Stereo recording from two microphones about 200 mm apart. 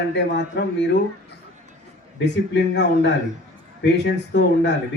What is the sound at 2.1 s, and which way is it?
Speech, 60° left (ahead or behind).